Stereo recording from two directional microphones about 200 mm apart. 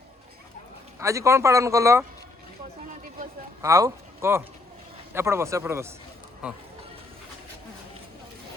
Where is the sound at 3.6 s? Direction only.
15° right (ahead or behind).